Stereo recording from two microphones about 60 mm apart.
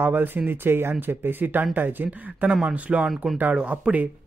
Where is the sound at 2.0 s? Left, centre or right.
Centre.